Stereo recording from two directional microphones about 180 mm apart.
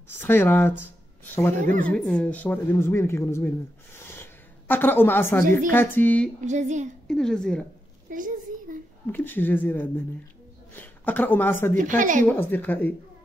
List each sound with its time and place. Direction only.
0.2 s speech: 10° left (ahead or behind)
6.4 s a woman's voice: 40° right (ahead or behind)
7.1 s a woman's voice: 5° left (ahead or behind)
8.1 s a sound: 50° right (ahead or behind)
9.0 s speech: 10° left (ahead or behind)
11.7 s a woman's voice: 45° right (ahead or behind)
12.3 s speech: 10° left (ahead or behind)